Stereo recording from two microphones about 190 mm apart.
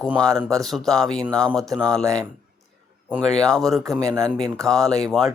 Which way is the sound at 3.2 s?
5° left (ahead or behind).